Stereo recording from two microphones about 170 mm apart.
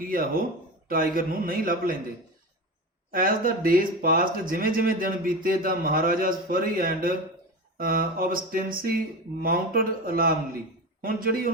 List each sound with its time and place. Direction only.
0.0 s speech: 55° right (ahead or behind)
3.1 s speech: 55° right (ahead or behind)